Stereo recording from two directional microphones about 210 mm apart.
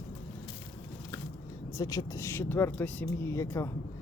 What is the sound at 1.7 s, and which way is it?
Speech, 15° left (ahead or behind).